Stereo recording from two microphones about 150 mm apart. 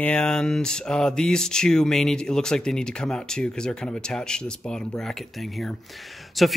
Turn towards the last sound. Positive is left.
turn(degrees=0)  # may be behind; listen again after turning